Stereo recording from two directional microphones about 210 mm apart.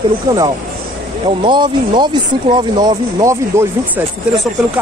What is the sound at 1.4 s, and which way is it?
Speech, 20° right (ahead or behind).